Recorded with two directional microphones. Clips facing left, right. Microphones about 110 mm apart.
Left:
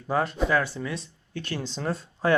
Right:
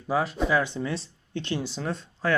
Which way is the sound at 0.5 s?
20° right (ahead or behind).